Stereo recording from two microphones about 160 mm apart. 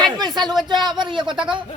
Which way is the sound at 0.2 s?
25° right (ahead or behind).